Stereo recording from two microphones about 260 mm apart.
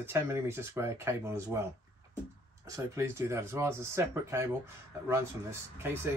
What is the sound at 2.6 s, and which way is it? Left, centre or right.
Speech, centre.